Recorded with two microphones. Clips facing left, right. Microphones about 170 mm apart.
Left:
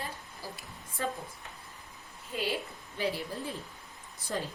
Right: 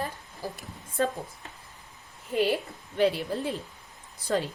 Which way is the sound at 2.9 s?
70° right (ahead or behind).